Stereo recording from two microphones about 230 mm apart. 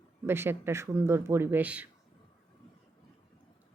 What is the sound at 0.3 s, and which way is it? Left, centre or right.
A woman's voice, centre.